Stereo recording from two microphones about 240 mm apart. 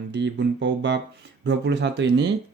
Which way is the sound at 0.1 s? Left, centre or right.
Right.